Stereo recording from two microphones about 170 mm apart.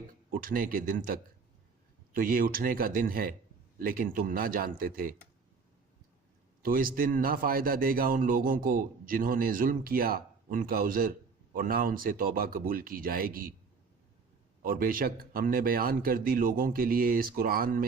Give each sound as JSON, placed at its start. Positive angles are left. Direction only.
{"t": 0.3, "sound": "a man's voice", "side_deg": -55}
{"t": 6.6, "sound": "a man's voice", "side_deg": -55}
{"t": 14.6, "sound": "a man's voice", "side_deg": -55}